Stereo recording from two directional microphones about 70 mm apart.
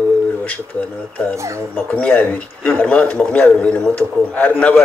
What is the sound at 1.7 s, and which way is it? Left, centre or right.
A man's voice, left.